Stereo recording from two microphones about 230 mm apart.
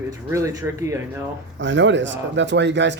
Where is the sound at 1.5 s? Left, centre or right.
Right.